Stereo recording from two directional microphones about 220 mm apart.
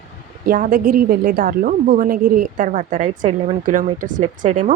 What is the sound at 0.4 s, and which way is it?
A woman's voice, 40° right (ahead or behind).